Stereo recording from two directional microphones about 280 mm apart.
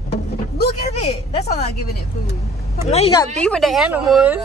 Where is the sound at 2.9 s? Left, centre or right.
Centre.